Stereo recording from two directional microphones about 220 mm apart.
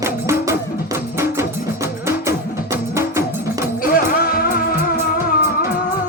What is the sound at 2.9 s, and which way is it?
Music, 15° right (ahead or behind).